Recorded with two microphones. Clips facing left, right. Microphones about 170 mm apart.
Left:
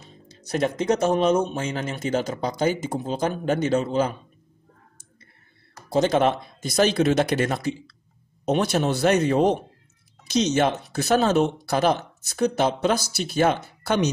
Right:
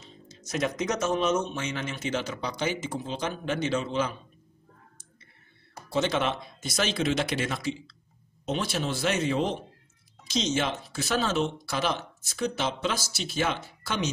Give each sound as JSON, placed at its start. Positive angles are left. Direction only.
{"t": 0.3, "sound": "speech", "side_deg": 35}
{"t": 5.9, "sound": "speech", "side_deg": 40}
{"t": 10.8, "sound": "speech", "side_deg": 60}
{"t": 11.8, "sound": "speech", "side_deg": 45}
{"t": 13.1, "sound": "speech", "side_deg": 55}